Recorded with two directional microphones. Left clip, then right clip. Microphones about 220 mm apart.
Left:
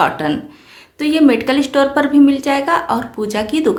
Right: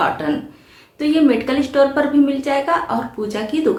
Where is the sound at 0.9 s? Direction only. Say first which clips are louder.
Left 3 dB; 40° left (ahead or behind).